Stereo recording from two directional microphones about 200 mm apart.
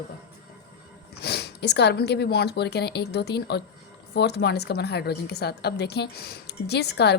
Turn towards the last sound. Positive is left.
turn(degrees=55)  # may be behind; listen again after turning